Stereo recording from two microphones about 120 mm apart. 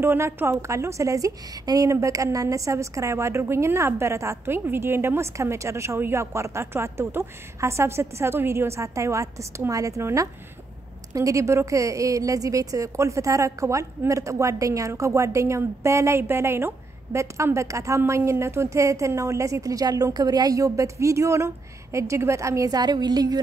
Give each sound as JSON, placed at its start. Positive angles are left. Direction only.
{"t": 0.0, "sound": "a woman's voice", "side_deg": -20}